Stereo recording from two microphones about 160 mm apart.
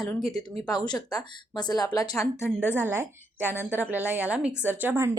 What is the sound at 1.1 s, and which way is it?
Speech, 25° left (ahead or behind).